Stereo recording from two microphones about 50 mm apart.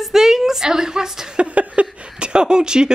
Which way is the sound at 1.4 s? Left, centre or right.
Right.